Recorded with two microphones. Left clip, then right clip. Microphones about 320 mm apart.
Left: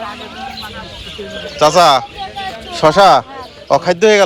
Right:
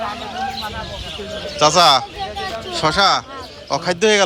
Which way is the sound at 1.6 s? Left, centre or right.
Centre.